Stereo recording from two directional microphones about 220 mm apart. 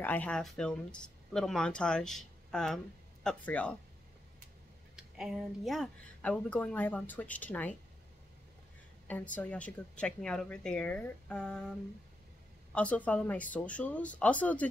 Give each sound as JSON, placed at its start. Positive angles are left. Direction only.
{"t": 0.0, "sound": "speech", "side_deg": 5}
{"t": 4.9, "sound": "speech", "side_deg": 0}
{"t": 9.3, "sound": "speech", "side_deg": 5}
{"t": 12.7, "sound": "speech", "side_deg": 5}